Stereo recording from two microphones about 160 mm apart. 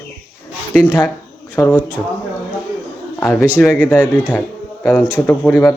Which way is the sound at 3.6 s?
5° left (ahead or behind).